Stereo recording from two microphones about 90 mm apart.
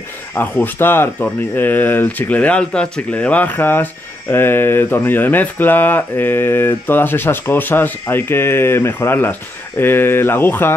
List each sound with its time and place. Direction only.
0.3 s speech: 20° left (ahead or behind)